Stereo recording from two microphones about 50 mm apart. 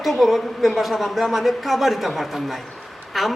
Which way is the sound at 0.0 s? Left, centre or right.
Centre.